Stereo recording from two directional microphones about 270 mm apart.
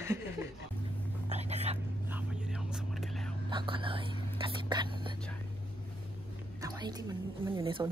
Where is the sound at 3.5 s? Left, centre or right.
Centre.